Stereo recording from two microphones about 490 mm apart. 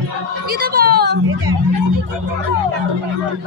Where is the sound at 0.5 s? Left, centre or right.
Centre.